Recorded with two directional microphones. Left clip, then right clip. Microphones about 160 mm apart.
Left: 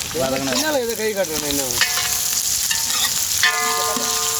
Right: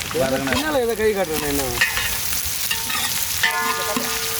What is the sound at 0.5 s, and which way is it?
Speech, 15° right (ahead or behind).